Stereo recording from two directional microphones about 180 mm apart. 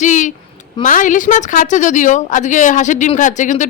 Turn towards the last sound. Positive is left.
turn(degrees=45)  # may be behind; listen again after turning